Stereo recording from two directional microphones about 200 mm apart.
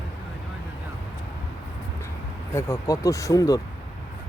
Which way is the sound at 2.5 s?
15° left (ahead or behind).